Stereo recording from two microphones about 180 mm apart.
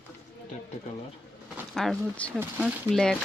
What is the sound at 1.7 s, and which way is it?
Speech, centre (ahead or behind).